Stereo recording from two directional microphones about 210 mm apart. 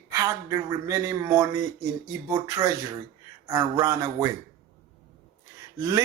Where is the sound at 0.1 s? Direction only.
15° right (ahead or behind).